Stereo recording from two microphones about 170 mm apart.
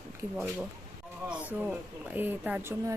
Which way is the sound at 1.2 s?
5° right (ahead or behind).